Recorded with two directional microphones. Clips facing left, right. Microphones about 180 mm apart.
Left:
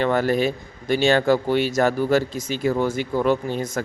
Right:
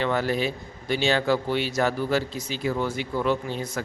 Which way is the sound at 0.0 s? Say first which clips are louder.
Left 5 dB; 50° left (ahead or behind).